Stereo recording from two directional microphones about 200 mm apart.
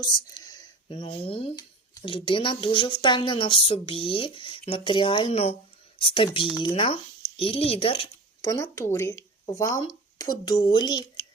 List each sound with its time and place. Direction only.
0.0 s speech: 20° left (ahead or behind)
8.4 s speech: 15° left (ahead or behind)